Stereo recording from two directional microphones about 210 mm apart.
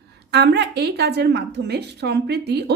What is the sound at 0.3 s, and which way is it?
A woman's voice, 55° right (ahead or behind).